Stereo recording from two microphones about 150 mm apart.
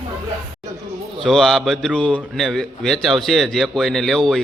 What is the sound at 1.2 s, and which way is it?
A man's voice, centre (ahead or behind).